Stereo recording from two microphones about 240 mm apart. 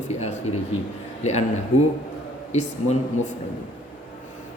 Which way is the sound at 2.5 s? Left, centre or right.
Left.